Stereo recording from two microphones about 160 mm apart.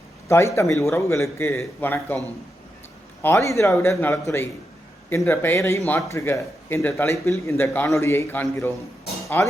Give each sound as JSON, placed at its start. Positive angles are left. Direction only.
{"t": 0.3, "sound": "speech", "side_deg": 15}